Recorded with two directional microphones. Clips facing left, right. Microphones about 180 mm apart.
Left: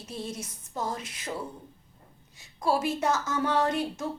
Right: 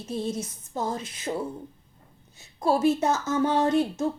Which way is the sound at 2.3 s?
25° right (ahead or behind).